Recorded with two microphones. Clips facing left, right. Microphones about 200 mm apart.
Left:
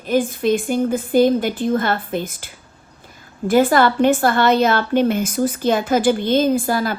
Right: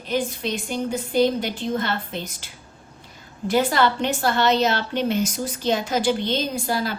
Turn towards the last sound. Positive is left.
turn(degrees=50)  # may be behind; listen again after turning